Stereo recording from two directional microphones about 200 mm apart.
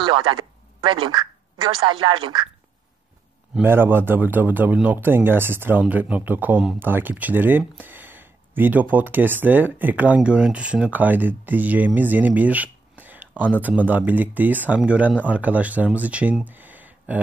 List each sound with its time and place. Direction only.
0.3 s speech: 25° right (ahead or behind)
3.5 s speech: 10° right (ahead or behind)